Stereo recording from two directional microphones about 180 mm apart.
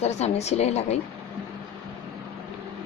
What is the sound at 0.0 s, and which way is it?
Speech, 40° left (ahead or behind).